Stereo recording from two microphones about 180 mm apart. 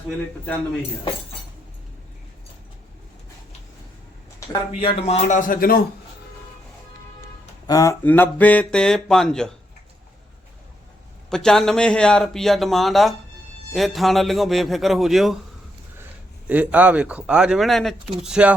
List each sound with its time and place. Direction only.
4.8 s speech: 30° left (ahead or behind); by 5.8 s 55° left (ahead or behind)
7.7 s speech: 15° left (ahead or behind)
11.3 s a man's voice: 5° left (ahead or behind)
16.5 s a man's voice: 10° right (ahead or behind)